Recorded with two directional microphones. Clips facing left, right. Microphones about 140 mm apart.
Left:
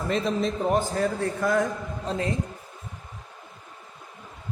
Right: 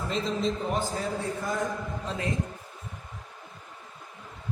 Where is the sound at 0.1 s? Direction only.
60° left (ahead or behind).